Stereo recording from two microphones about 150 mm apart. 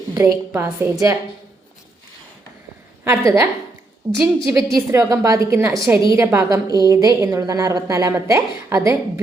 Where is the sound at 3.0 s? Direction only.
20° right (ahead or behind).